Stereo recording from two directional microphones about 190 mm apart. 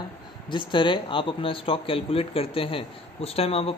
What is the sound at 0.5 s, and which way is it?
Speech, 25° left (ahead or behind).